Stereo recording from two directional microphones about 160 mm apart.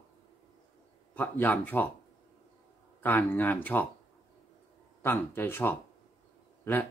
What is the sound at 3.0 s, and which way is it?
Speech, 10° left (ahead or behind).